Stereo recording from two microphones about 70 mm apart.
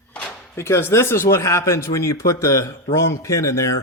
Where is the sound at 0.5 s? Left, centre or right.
Left.